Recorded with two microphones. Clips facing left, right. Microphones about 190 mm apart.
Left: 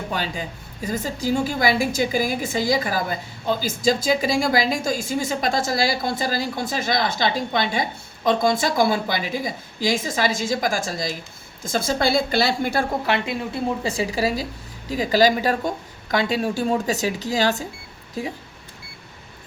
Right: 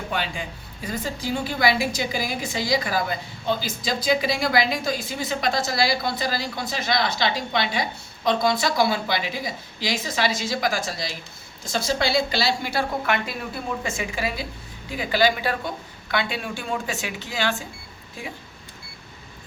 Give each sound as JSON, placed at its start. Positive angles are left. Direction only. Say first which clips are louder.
{"t": 0.1, "sound": "a woman's voice", "louder": "right 1 dB", "side_deg": 40}
{"t": 13.1, "sound": "a woman's voice", "louder": "left 3 dB", "side_deg": 25}